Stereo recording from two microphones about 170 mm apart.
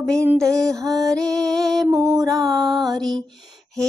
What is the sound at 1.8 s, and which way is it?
Music, 15° right (ahead or behind).